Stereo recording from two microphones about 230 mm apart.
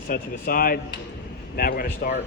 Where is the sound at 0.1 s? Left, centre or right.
Left.